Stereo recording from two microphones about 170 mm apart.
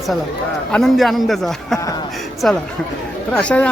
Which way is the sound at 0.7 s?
Centre (ahead or behind).